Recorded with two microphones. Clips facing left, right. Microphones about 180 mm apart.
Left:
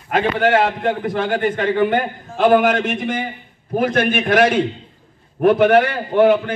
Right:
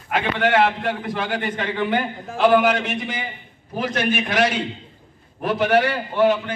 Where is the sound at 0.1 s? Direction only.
45° left (ahead or behind).